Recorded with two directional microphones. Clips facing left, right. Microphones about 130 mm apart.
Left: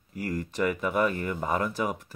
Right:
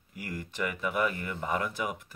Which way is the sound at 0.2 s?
35° left (ahead or behind).